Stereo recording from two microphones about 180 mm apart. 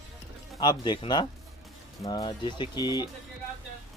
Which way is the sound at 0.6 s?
25° left (ahead or behind).